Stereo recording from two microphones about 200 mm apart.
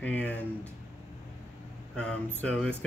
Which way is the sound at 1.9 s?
5° left (ahead or behind).